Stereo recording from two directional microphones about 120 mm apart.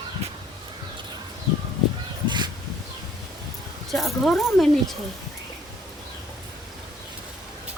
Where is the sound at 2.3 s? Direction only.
40° right (ahead or behind).